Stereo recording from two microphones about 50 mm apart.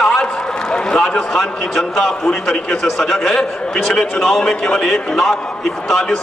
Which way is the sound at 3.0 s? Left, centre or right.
Centre.